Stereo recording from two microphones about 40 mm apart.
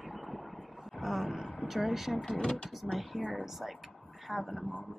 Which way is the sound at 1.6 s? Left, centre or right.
Centre.